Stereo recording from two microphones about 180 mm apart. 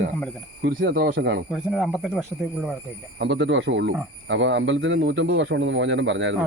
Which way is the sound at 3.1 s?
75° right (ahead or behind).